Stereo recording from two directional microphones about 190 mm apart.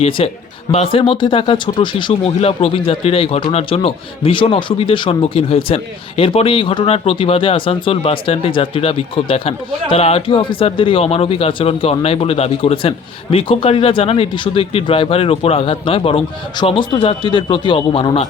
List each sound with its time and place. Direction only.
0.2 s a man's voice: 30° left (ahead or behind)